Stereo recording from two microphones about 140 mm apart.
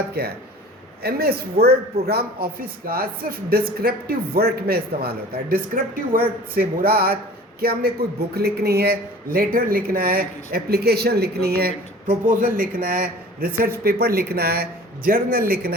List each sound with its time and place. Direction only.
1.0 s speech: 90° right